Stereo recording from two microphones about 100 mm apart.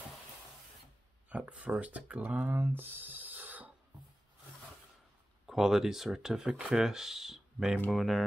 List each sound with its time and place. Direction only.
1.3 s speech: 15° right (ahead or behind)
3.0 s a sound: 15° right (ahead or behind)
5.5 s speech: centre (ahead or behind)